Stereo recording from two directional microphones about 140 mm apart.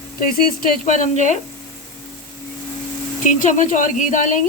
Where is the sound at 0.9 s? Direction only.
60° left (ahead or behind).